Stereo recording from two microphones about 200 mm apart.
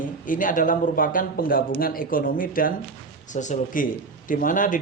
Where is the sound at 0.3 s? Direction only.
40° left (ahead or behind).